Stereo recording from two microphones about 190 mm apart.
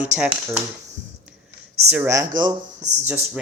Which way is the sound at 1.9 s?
10° right (ahead or behind).